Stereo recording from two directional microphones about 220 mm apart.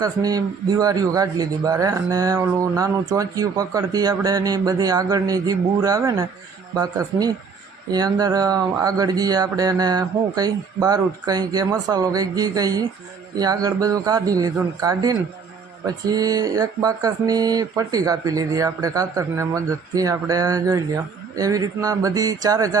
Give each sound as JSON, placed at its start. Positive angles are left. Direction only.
{"t": 0.0, "sound": "speech", "side_deg": -15}